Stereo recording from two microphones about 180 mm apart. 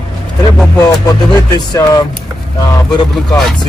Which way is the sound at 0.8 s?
20° left (ahead or behind).